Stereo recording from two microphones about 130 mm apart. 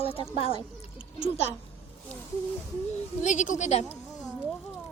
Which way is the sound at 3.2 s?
75° left (ahead or behind).